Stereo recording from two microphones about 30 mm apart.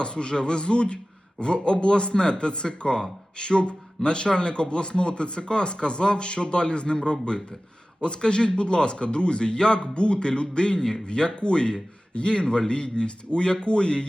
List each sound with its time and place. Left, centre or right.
0.0 s a man's voice: left